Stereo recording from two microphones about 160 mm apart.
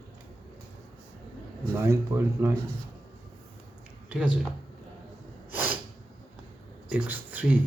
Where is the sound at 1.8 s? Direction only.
15° right (ahead or behind).